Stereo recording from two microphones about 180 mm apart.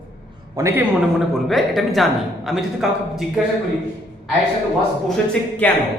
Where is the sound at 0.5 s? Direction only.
15° right (ahead or behind).